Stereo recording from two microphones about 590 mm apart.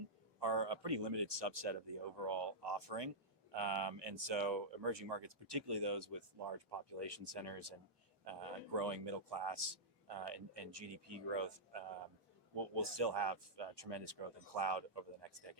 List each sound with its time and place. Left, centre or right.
0.3 s a man's voice: right